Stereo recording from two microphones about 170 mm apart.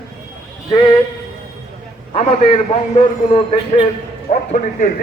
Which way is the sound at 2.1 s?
35° left (ahead or behind).